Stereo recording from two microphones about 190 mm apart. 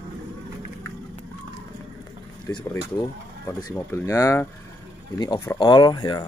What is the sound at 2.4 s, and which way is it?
Speech, 20° left (ahead or behind).